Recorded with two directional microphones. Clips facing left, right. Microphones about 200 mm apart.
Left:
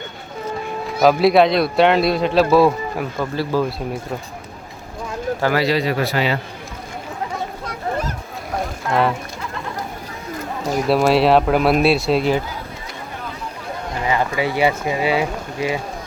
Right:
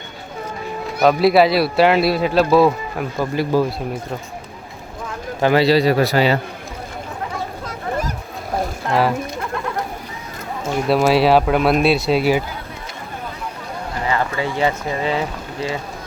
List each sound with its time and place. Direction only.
1.0 s a man's voice: centre (ahead or behind)
3.3 s speech: 15° right (ahead or behind)
5.4 s a man's voice: 25° right (ahead or behind)
10.6 s speech: 40° left (ahead or behind)
10.8 s a man's voice: centre (ahead or behind)
14.1 s speech: 15° left (ahead or behind)